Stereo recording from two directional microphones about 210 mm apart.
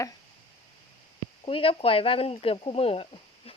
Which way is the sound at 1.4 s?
25° left (ahead or behind).